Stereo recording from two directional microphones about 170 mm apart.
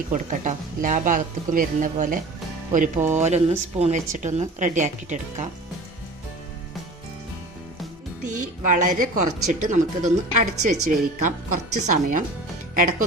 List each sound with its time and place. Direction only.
0.1 s a woman's voice: 50° right (ahead or behind)
8.2 s a woman's voice: 50° right (ahead or behind)